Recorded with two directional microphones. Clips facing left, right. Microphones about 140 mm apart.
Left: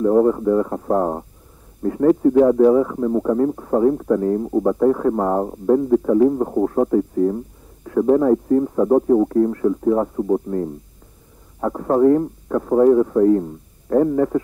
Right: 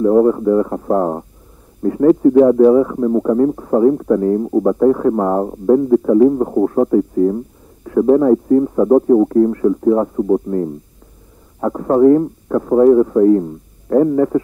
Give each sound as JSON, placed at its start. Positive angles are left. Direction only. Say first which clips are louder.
{"t": 0.0, "sound": "speech", "louder": "right 3 dB", "side_deg": -20}